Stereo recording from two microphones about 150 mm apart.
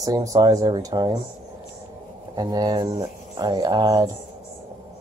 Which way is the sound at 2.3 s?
30° right (ahead or behind).